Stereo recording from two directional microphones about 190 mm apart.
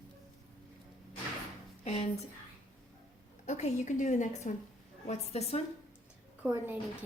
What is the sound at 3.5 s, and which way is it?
A woman's voice, 40° left (ahead or behind).